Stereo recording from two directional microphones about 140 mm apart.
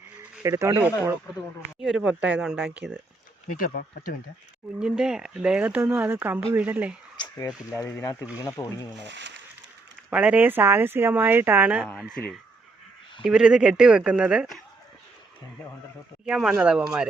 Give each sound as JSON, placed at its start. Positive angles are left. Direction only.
{"t": 0.4, "sound": "speech", "side_deg": -20}
{"t": 1.8, "sound": "speech", "side_deg": -5}
{"t": 3.6, "sound": "speech", "side_deg": 85}
{"t": 4.8, "sound": "speech", "side_deg": -5}
{"t": 7.2, "sound": "a sound", "side_deg": 25}
{"t": 7.7, "sound": "speech", "side_deg": 20}
{"t": 10.1, "sound": "speech", "side_deg": -10}
{"t": 12.1, "sound": "speech", "side_deg": 5}
{"t": 13.2, "sound": "speech", "side_deg": -5}
{"t": 16.2, "sound": "speech", "side_deg": -5}